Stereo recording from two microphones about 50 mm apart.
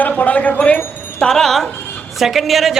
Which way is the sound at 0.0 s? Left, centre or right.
Left.